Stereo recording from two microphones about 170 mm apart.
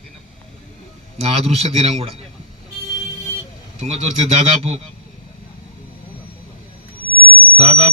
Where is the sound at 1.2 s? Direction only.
40° right (ahead or behind).